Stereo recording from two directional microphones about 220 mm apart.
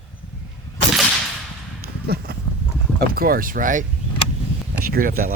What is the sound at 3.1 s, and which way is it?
Speech, 40° right (ahead or behind).